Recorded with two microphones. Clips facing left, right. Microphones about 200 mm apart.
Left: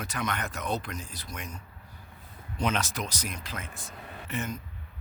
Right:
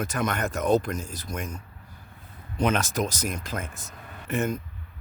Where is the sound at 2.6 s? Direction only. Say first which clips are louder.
Right 6 dB; 50° right (ahead or behind).